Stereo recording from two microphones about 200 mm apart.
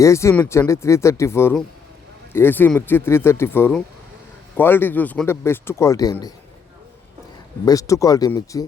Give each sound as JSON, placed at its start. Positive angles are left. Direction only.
{"t": 0.0, "sound": "speech", "side_deg": 15}
{"t": 7.6, "sound": "speech", "side_deg": 15}